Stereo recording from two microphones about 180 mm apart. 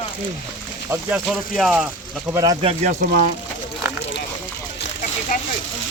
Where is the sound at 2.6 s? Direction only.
45° right (ahead or behind).